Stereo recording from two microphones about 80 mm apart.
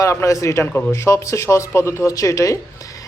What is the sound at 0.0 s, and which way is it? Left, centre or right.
Speech, left.